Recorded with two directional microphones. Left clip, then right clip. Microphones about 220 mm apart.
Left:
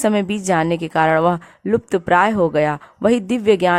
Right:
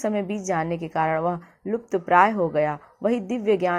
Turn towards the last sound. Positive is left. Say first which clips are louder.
# left 7 dB
turn(degrees=35)  # may be behind; listen again after turning